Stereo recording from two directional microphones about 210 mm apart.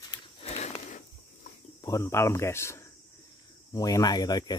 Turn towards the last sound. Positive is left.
turn(degrees=20)  # may be behind; listen again after turning